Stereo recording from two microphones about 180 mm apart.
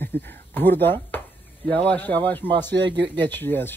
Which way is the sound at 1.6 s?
10° left (ahead or behind).